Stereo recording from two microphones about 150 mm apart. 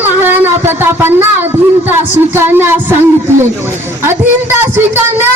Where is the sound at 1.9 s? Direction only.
15° right (ahead or behind).